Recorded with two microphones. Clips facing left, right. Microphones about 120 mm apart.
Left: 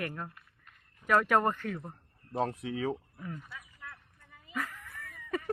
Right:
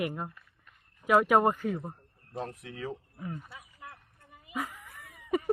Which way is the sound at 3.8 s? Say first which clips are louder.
Right 1 dB; 15° right (ahead or behind).